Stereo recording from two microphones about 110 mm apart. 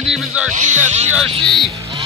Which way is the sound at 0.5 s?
90° right.